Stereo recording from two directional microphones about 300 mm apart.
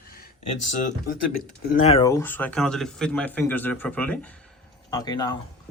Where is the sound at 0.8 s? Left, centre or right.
Left.